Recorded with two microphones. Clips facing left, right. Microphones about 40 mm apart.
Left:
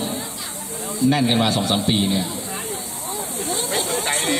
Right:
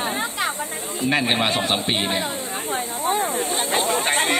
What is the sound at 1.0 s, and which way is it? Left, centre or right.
Speech, right.